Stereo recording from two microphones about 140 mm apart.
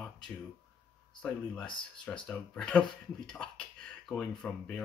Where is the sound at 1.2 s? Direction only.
10° left (ahead or behind).